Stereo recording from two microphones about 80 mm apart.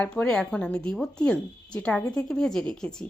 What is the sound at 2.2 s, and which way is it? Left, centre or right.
Speech, centre.